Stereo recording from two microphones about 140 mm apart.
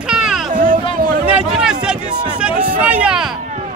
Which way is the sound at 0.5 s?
75° right (ahead or behind).